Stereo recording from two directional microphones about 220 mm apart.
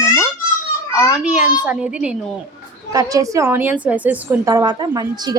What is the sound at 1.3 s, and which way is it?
Speech, 5° right (ahead or behind).